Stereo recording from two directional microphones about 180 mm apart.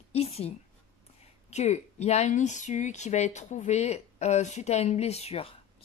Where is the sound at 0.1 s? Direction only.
35° left (ahead or behind).